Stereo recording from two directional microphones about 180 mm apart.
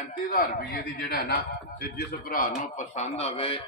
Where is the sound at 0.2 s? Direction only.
55° left (ahead or behind).